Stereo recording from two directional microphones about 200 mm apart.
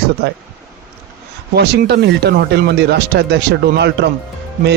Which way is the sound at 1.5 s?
55° right (ahead or behind).